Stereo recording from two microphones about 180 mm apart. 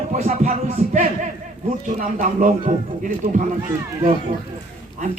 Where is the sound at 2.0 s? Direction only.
45° right (ahead or behind).